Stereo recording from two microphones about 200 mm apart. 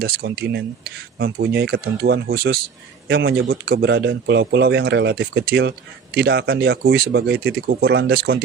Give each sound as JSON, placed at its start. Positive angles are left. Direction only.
{"t": 0.0, "sound": "a man's voice", "side_deg": -55}